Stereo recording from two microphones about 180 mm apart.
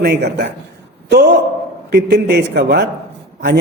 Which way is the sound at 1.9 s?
65° right (ahead or behind).